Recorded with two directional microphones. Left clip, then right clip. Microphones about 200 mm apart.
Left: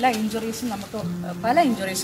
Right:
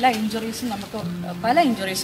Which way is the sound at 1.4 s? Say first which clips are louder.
Right 1 dB; 10° left (ahead or behind).